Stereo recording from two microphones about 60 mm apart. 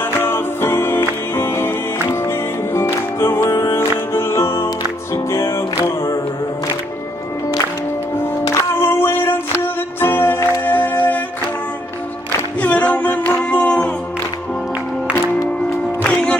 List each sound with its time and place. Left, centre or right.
0.0 s music: left
8.8 s a sound: left
9.9 s music: left
12.5 s music: left
16.0 s music: centre